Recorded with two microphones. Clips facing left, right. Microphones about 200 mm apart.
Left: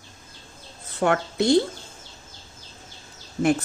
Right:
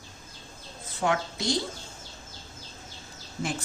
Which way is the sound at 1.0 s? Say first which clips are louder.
Left 6 dB; 60° left (ahead or behind).